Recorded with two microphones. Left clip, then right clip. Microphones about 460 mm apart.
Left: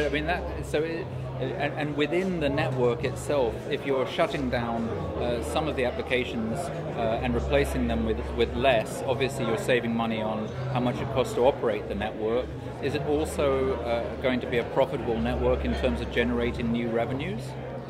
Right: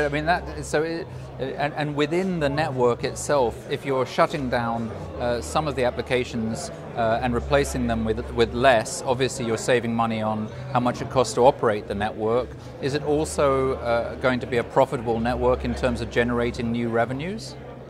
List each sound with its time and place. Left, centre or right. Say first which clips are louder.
0.0 s a man's voice: right 5 dB; right